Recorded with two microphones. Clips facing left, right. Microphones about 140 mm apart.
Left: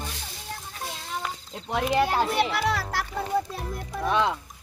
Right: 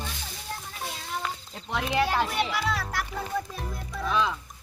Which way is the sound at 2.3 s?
65° left (ahead or behind).